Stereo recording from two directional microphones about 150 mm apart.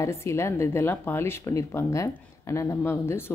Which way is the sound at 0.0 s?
20° left (ahead or behind).